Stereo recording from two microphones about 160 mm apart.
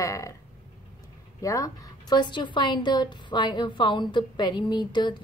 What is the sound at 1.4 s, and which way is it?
A woman's voice, 20° left (ahead or behind).